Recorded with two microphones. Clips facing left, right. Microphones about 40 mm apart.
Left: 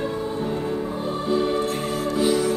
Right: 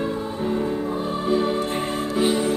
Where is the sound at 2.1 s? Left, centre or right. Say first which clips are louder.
Even; right.